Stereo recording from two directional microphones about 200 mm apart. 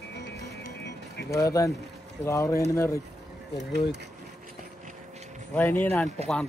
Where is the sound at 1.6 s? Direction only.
15° left (ahead or behind).